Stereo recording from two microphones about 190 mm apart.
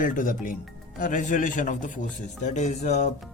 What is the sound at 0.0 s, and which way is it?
Speech, 45° left (ahead or behind).